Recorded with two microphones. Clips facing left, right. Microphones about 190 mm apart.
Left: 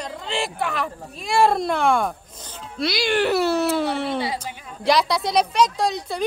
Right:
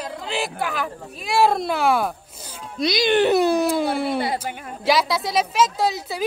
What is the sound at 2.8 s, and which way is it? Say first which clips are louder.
Speech: right 3 dB; 20° right (ahead or behind).